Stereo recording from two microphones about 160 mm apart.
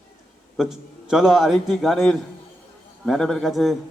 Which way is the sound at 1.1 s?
Centre (ahead or behind).